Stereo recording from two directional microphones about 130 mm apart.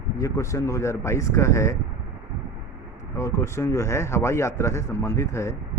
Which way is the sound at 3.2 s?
20° left (ahead or behind).